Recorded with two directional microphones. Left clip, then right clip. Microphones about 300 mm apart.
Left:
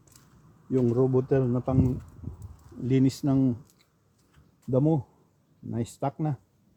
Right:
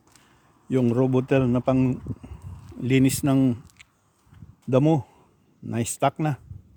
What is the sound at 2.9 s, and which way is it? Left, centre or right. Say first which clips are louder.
Speech: right 4 dB; right.